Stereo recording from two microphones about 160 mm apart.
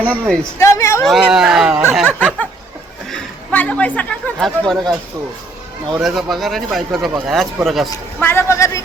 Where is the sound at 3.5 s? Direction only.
10° left (ahead or behind).